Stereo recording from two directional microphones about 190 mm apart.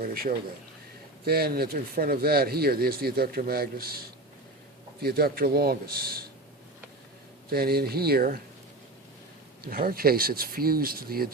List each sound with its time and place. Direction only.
0.0 s speech: 50° right (ahead or behind)
7.5 s speech: 55° right (ahead or behind)
9.6 s speech: 50° right (ahead or behind)